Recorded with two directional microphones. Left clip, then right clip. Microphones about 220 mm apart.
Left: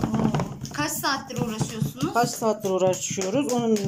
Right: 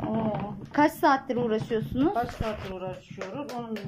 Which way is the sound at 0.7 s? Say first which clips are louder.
Right 4 dB; 30° right (ahead or behind).